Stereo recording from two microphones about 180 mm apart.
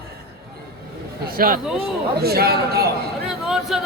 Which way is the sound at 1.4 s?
50° right (ahead or behind).